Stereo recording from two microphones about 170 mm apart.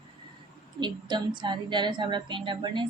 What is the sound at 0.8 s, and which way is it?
A woman's voice, 25° right (ahead or behind).